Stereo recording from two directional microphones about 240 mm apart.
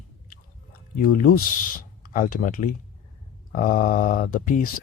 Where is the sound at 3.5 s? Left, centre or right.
Left.